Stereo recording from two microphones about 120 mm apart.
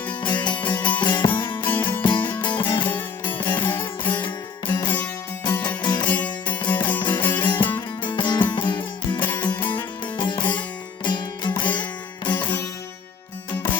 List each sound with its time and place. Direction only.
0.1 s music: 40° left (ahead or behind)